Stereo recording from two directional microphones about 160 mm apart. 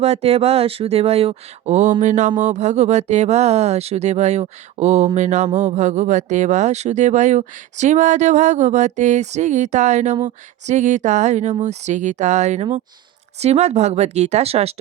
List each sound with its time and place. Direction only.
0.0 s speech: 40° right (ahead or behind)